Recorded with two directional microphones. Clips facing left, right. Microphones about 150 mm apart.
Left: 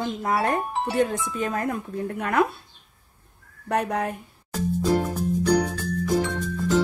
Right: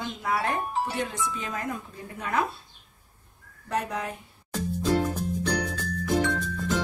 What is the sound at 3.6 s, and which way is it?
Speech, 60° left (ahead or behind).